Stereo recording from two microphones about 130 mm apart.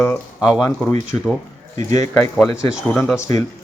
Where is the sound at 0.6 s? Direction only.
15° left (ahead or behind).